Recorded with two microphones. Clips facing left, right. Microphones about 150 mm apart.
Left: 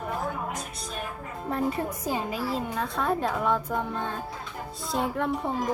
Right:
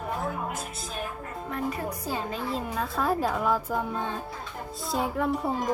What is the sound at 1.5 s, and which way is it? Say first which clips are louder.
Speech: left 4 dB; 30° left (ahead or behind).